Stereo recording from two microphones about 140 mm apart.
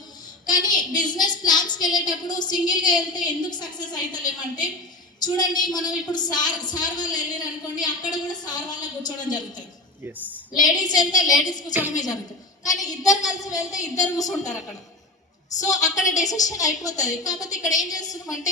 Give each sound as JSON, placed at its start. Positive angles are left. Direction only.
{"t": 0.4, "sound": "a woman's voice", "side_deg": 30}
{"t": 10.8, "sound": "a woman's voice", "side_deg": 30}
{"t": 11.7, "sound": "a woman's voice", "side_deg": -15}
{"t": 12.8, "sound": "a woman's voice", "side_deg": 25}